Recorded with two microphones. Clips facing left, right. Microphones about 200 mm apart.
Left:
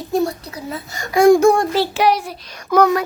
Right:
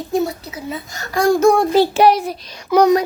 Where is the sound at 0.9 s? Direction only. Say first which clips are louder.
Left 5 dB; 15° left (ahead or behind).